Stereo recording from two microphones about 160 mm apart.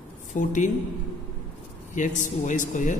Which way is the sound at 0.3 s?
50° left (ahead or behind).